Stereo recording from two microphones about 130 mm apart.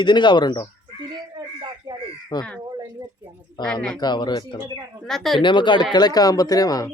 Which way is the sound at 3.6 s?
5° left (ahead or behind).